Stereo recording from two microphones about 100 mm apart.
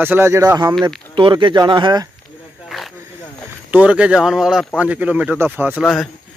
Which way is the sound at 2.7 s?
Centre (ahead or behind).